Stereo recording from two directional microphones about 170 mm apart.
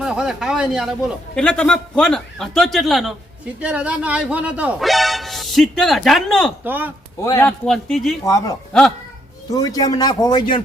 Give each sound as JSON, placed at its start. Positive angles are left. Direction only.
{"t": 0.0, "sound": "a man's voice", "side_deg": -5}
{"t": 6.7, "sound": "speech", "side_deg": -10}
{"t": 7.2, "sound": "a man's voice", "side_deg": 15}
{"t": 7.6, "sound": "speech", "side_deg": 5}
{"t": 8.2, "sound": "a man's voice", "side_deg": 20}